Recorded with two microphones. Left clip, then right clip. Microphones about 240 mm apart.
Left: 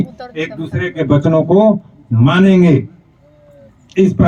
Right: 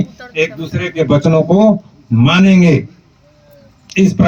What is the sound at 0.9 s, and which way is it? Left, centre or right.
Speech, right.